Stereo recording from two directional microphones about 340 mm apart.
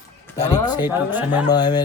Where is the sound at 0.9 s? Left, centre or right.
Centre.